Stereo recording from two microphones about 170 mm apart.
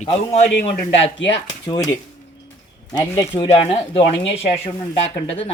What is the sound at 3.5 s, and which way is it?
Speech, 35° left (ahead or behind).